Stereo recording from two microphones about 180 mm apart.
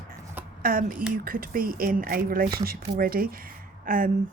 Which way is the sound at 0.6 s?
50° right (ahead or behind).